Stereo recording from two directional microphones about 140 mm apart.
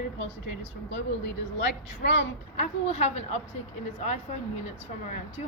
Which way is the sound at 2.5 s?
50° left (ahead or behind).